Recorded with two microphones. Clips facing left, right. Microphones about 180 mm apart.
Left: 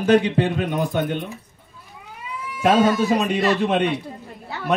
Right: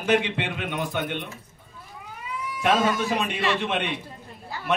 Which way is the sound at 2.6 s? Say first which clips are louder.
Left 6 dB; 40° left (ahead or behind).